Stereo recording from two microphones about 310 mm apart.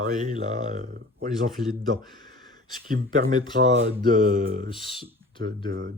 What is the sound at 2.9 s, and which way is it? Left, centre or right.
Speech, right.